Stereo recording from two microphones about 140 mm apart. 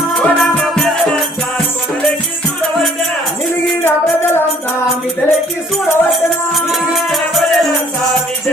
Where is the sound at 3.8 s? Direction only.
15° left (ahead or behind).